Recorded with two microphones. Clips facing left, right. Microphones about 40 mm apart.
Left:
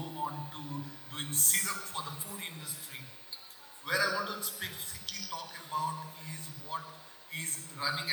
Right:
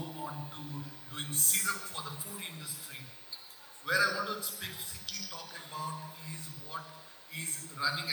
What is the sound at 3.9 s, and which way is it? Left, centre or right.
Speech, left.